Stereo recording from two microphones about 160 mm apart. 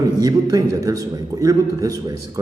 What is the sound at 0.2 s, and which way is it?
A man's voice, 25° right (ahead or behind).